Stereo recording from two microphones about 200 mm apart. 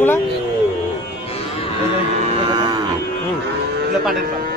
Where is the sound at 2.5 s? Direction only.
20° right (ahead or behind).